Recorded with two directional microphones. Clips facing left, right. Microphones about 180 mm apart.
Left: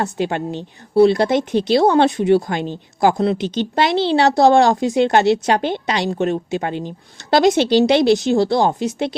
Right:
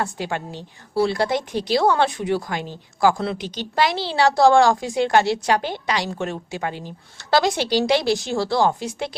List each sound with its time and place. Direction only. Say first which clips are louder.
0.0 s a woman's voice: left 5 dB; 20° left (ahead or behind)